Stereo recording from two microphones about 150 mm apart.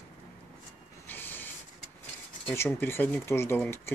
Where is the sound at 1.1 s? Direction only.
15° left (ahead or behind).